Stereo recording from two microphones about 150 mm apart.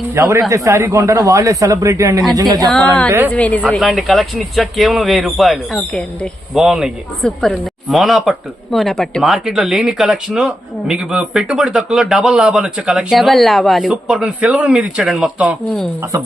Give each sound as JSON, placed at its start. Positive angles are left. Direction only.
{"t": 0.1, "sound": "speech", "side_deg": -20}
{"t": 2.6, "sound": "speech", "side_deg": 5}
{"t": 3.1, "sound": "a woman's voice", "side_deg": -15}
{"t": 3.3, "sound": "speech", "side_deg": 10}